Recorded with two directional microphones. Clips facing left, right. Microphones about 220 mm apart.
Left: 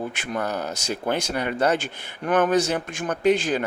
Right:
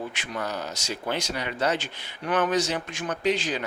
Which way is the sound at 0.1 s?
50° left (ahead or behind).